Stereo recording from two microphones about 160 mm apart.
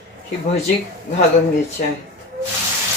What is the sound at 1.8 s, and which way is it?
Speech, 60° left (ahead or behind).